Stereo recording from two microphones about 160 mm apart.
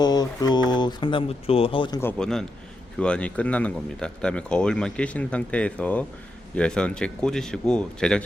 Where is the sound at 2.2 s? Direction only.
5° left (ahead or behind).